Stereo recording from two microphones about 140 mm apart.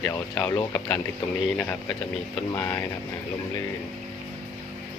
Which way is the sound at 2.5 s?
25° left (ahead or behind).